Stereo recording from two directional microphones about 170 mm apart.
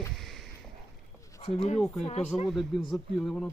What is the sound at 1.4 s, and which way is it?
Speech, 40° left (ahead or behind).